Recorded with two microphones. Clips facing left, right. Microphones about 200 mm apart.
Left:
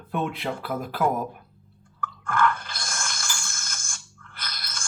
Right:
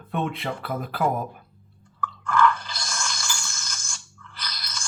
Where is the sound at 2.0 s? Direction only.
50° left (ahead or behind).